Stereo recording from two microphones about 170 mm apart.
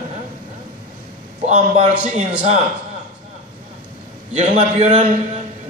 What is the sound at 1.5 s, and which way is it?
Speech, 40° right (ahead or behind).